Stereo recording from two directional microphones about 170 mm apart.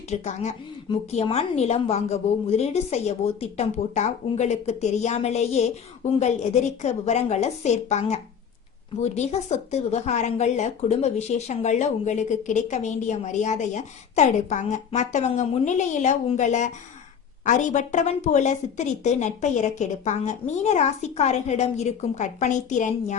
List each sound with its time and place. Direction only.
0.1 s a woman's voice: 40° left (ahead or behind)